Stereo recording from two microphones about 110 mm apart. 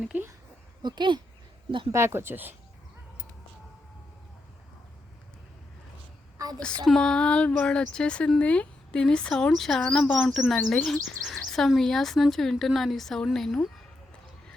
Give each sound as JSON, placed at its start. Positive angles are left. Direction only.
{"t": 0.0, "sound": "a sound", "side_deg": -10}
{"t": 0.8, "sound": "speech", "side_deg": -45}
{"t": 1.9, "sound": "speech", "side_deg": -25}
{"t": 6.6, "sound": "speech", "side_deg": 5}